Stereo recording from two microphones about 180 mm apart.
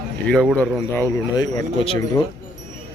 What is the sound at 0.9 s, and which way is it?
Speech, 20° left (ahead or behind).